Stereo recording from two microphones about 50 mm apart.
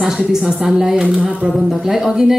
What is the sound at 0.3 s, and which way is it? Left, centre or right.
Speech, centre.